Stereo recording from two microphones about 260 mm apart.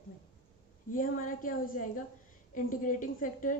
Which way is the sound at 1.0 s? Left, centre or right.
Left.